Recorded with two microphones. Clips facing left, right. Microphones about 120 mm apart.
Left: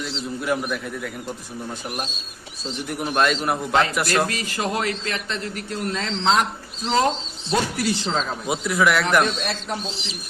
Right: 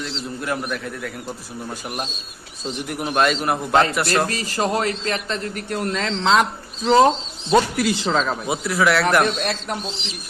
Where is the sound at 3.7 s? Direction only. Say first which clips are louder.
Right 3 dB; 40° right (ahead or behind).